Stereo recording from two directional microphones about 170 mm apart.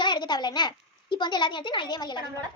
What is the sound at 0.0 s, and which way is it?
A child's voice, 25° left (ahead or behind).